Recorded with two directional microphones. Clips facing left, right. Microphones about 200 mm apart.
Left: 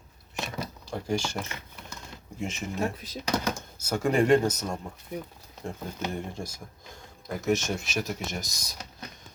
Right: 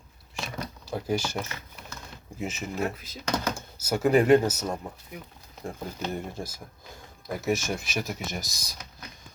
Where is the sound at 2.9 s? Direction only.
35° left (ahead or behind).